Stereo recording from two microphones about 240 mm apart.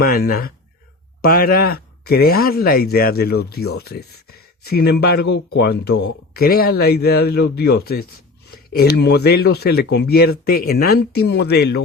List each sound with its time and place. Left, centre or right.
0.0 s speech: left